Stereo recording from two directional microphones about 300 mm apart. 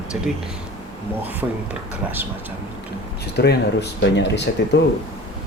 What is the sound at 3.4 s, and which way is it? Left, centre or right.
Speech, left.